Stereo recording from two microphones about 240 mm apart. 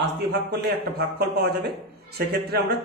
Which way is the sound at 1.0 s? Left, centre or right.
Right.